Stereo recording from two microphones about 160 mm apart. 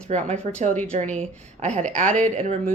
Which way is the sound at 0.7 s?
10° left (ahead or behind).